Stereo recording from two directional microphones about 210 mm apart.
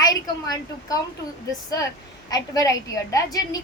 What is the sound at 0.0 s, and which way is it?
A woman's voice, 15° left (ahead or behind).